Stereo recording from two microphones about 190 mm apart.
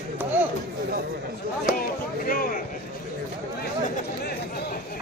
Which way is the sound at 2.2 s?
45° left (ahead or behind).